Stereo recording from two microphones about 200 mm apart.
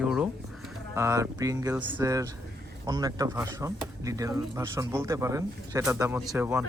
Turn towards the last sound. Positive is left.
turn(degrees=-10)  # may be behind; listen again after turning